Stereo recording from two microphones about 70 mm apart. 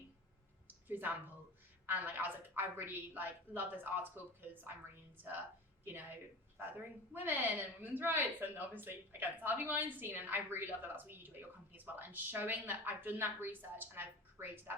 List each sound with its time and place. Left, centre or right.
0.9 s speech: right